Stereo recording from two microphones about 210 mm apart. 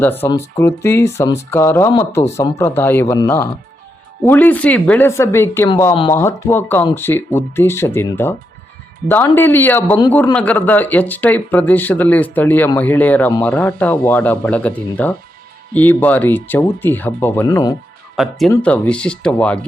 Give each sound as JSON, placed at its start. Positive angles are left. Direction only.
{"t": 0.0, "sound": "speech", "side_deg": 10}
{"t": 5.9, "sound": "speech", "side_deg": 25}
{"t": 6.1, "sound": "speech", "side_deg": 10}
{"t": 18.2, "sound": "speech", "side_deg": 0}